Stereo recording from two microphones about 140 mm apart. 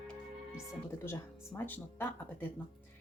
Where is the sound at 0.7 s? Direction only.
20° left (ahead or behind).